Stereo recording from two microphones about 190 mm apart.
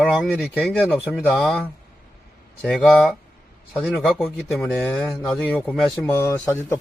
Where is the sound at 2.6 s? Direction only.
Centre (ahead or behind).